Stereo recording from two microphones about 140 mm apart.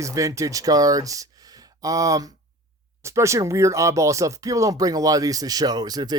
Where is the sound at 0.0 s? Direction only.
20° right (ahead or behind).